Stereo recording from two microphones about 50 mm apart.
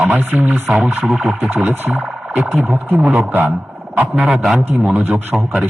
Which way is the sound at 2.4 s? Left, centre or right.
Centre.